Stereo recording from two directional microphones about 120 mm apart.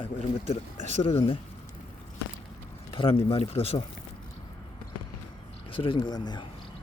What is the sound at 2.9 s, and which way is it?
Speech, 50° left (ahead or behind).